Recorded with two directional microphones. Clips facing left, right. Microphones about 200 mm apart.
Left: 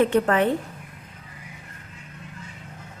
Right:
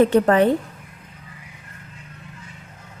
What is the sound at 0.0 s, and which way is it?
Speech, 35° right (ahead or behind).